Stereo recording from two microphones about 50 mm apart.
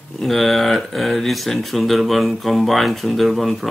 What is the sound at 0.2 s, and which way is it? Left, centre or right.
Speech, centre.